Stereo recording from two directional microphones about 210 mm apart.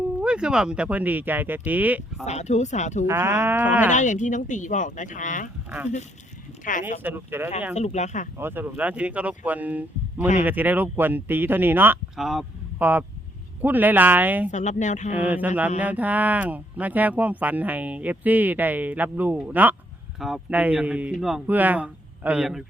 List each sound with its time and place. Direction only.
0.2 s speech: 5° right (ahead or behind)
2.2 s speech: 35° left (ahead or behind)
3.1 s speech: 10° right (ahead or behind)
3.9 s speech: 35° left (ahead or behind)
7.0 s speech: 10° right (ahead or behind)
7.8 s speech: 35° left (ahead or behind)
8.4 s speech: 10° right (ahead or behind)
14.5 s speech: 35° left (ahead or behind)
15.1 s speech: 10° right (ahead or behind)